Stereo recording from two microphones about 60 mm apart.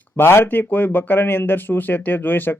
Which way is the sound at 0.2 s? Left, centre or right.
Left.